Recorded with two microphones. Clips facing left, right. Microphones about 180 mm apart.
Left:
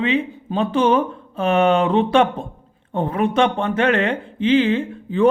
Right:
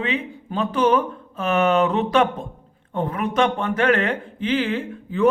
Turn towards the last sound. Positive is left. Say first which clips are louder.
# left 3 dB
turn(degrees=25)  # may be behind; listen again after turning